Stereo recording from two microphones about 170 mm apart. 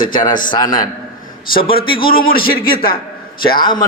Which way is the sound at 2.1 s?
60° left (ahead or behind).